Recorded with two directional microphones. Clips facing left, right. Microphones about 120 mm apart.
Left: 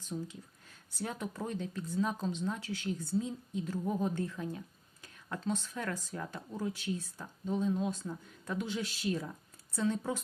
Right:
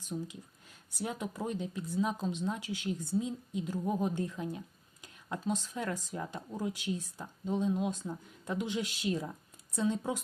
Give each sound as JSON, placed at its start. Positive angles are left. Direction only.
{"t": 0.0, "sound": "speech", "side_deg": -15}